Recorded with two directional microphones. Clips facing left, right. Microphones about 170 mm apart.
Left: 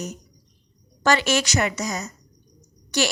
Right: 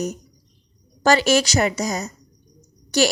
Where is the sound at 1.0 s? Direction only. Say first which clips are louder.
Right 4 dB; 35° right (ahead or behind).